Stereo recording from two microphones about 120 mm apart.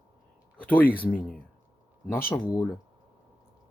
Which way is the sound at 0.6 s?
15° left (ahead or behind).